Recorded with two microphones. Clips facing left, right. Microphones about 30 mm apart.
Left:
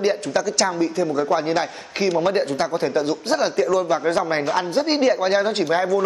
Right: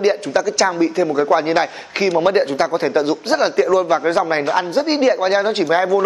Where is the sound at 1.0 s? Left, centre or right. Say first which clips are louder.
Right 5 dB; right.